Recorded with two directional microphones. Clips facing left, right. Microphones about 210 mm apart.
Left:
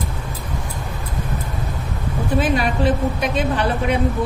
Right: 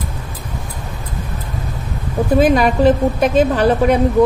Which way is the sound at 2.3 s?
40° right (ahead or behind).